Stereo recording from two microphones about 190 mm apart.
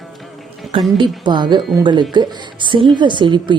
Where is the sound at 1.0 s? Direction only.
25° right (ahead or behind).